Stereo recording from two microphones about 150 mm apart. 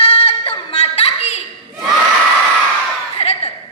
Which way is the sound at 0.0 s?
40° left (ahead or behind).